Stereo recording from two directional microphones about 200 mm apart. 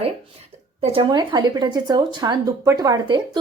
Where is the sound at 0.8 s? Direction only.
25° right (ahead or behind).